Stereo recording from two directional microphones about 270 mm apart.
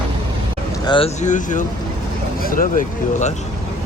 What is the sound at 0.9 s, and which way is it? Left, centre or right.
Speech, left.